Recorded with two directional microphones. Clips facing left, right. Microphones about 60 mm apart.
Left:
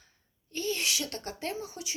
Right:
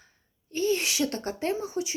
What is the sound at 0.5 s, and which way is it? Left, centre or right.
Speech, right.